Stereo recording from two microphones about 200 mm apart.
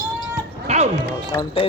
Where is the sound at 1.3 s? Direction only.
20° left (ahead or behind).